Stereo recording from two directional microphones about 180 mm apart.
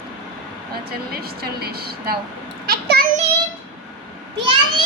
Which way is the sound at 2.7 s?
60° right (ahead or behind).